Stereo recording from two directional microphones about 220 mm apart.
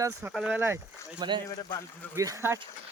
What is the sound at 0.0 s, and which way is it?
Speech, 15° right (ahead or behind).